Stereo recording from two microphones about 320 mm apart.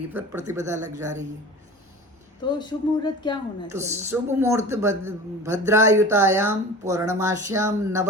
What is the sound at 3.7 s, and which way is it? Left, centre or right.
A man's voice, centre.